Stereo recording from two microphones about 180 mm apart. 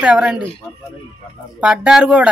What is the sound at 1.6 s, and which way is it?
Speech, 5° right (ahead or behind).